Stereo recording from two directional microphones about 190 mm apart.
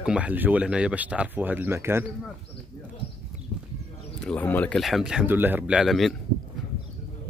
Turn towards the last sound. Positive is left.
turn(degrees=0)  # may be behind; listen again after turning